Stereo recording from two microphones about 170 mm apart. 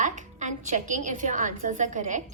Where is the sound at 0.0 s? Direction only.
45° right (ahead or behind).